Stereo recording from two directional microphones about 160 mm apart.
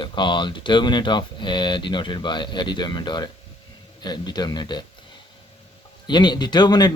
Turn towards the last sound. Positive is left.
turn(degrees=25)  # may be behind; listen again after turning